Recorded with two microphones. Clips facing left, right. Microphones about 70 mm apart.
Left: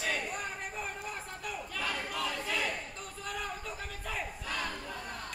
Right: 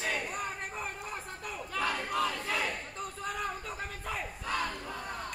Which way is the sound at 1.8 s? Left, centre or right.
Right.